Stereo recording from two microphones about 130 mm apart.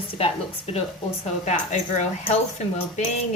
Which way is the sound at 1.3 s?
65° left (ahead or behind).